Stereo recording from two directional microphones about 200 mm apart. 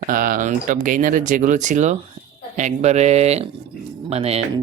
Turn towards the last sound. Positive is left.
turn(degrees=-30)  # may be behind; listen again after turning